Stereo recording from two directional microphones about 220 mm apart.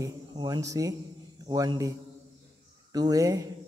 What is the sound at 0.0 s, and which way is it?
Speech, 20° right (ahead or behind).